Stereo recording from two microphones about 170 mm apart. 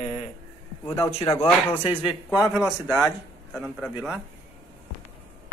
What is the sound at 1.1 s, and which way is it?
Speech, 40° left (ahead or behind).